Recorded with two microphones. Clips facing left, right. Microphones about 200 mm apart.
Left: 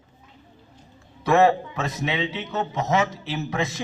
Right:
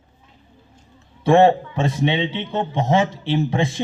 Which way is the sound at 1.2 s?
30° right (ahead or behind).